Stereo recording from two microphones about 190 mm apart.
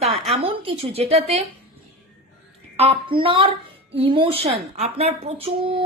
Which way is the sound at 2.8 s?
30° right (ahead or behind).